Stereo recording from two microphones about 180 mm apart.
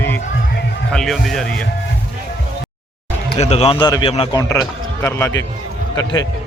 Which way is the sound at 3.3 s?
35° left (ahead or behind).